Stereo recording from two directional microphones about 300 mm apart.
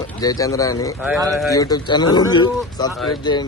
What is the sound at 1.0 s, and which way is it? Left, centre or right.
Speech, centre.